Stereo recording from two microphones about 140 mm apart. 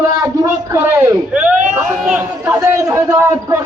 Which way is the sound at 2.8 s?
20° right (ahead or behind).